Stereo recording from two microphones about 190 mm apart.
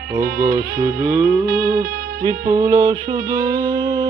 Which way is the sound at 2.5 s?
15° right (ahead or behind).